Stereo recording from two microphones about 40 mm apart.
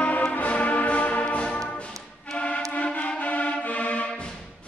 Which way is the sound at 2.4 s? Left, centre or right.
Left.